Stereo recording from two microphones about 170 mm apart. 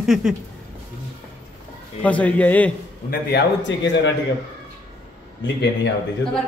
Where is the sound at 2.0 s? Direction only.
10° left (ahead or behind).